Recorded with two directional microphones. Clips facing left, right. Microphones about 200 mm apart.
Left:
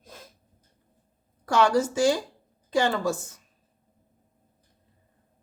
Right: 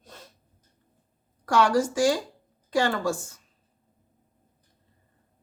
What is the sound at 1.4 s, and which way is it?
Speech, 25° left (ahead or behind).